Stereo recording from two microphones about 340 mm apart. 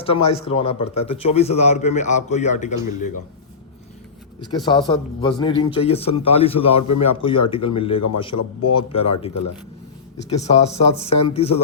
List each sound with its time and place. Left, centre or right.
0.0 s speech: centre
4.4 s a man's voice: centre
8.3 s a man's voice: left
8.7 s speech: centre